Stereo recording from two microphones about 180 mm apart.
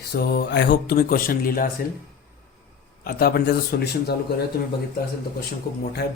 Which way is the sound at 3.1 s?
55° left (ahead or behind).